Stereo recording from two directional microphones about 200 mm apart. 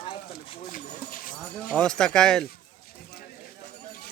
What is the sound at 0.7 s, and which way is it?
Speech, 45° left (ahead or behind).